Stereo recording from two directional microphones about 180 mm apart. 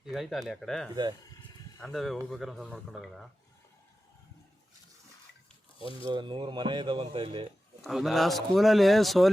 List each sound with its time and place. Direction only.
0.0 s speech: centre (ahead or behind)
6.0 s speech: 25° right (ahead or behind)
7.9 s speech: centre (ahead or behind)